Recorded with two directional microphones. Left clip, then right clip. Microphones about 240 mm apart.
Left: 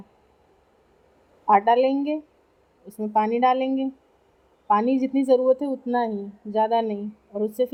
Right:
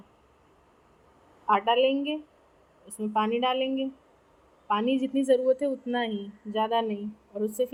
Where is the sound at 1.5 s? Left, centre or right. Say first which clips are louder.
Left 5 dB; centre.